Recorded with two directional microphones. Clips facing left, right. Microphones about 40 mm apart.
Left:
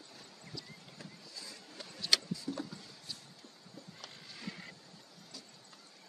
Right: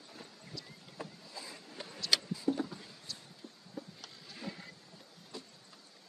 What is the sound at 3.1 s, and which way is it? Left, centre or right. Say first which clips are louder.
Vehicle: even; centre.